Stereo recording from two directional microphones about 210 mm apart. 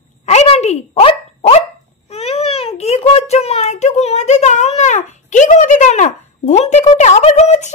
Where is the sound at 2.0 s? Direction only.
30° left (ahead or behind).